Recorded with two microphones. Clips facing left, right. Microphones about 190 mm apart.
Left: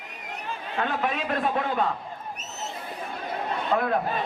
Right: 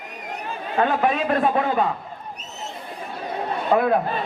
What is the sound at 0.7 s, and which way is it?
Speech, 55° right (ahead or behind).